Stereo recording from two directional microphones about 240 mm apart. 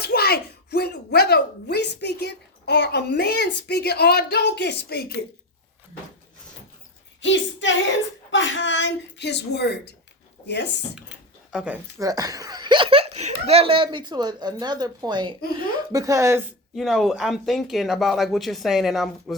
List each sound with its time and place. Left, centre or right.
0.0 s speech: left
7.2 s speech: left
11.5 s speech: centre
16.7 s speech: centre